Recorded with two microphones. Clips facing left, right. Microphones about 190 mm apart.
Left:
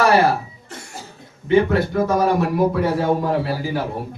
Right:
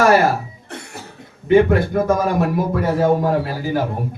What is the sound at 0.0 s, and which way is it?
Cough, 45° right (ahead or behind).